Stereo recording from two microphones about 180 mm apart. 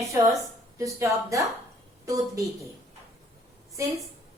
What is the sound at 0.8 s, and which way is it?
Speech, 15° right (ahead or behind).